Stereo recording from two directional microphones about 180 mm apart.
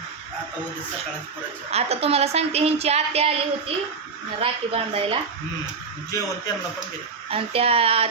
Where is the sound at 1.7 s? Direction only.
35° right (ahead or behind).